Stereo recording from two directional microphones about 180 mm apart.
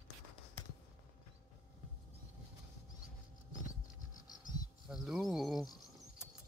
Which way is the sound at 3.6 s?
50° left (ahead or behind).